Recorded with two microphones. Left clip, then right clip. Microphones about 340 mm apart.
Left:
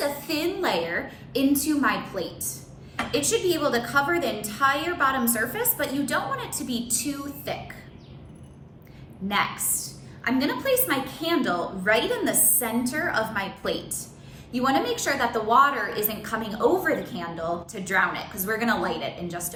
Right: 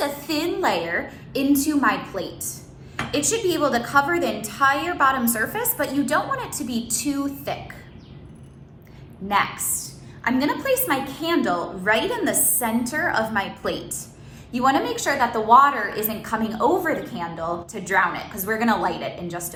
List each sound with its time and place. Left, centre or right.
0.0 s a woman's voice: centre
10.2 s a woman's voice: centre